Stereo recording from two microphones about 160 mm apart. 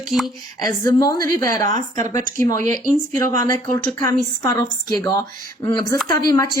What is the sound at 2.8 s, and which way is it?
Speech, 55° right (ahead or behind).